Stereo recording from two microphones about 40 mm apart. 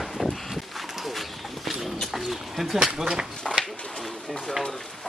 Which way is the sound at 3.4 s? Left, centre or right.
Centre.